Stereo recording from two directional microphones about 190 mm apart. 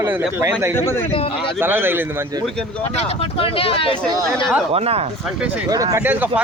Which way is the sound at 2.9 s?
35° left (ahead or behind).